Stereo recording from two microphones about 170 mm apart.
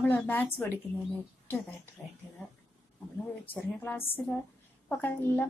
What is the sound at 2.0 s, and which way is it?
Speech, centre (ahead or behind).